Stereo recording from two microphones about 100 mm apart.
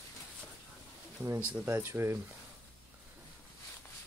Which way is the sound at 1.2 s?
20° right (ahead or behind).